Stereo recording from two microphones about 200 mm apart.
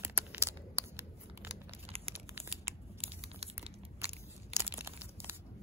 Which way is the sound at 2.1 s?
10° right (ahead or behind).